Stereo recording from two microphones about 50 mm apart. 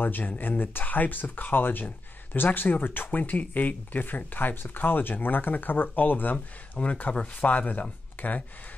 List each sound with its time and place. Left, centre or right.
0.0 s speech: left
6.8 s speech: left